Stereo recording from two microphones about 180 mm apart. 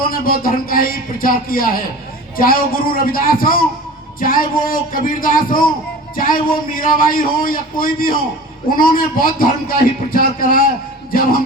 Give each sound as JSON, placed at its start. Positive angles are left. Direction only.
{"t": 0.1, "sound": "a man's voice", "side_deg": 55}